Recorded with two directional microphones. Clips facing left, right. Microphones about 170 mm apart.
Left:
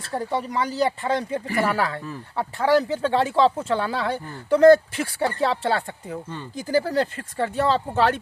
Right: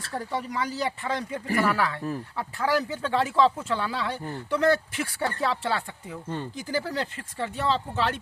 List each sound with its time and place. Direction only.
0.1 s speech: 25° left (ahead or behind); by 8.2 s 50° left (ahead or behind)